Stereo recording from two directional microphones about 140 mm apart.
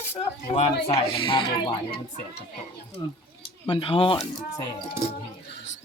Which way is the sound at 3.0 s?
35° left (ahead or behind).